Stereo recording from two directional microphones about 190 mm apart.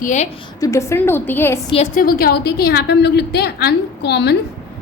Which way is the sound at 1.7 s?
40° left (ahead or behind).